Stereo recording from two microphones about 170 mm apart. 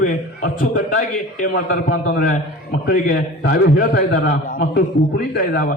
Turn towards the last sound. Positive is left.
turn(degrees=55)  # may be behind; listen again after turning